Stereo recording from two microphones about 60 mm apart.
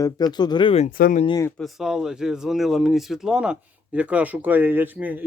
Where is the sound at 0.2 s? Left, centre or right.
Left.